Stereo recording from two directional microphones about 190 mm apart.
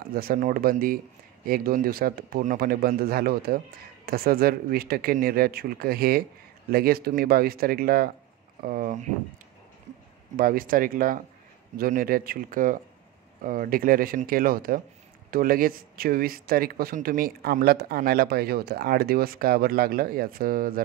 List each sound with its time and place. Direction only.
0.0 s speech: 50° right (ahead or behind)
10.3 s speech: 50° right (ahead or behind)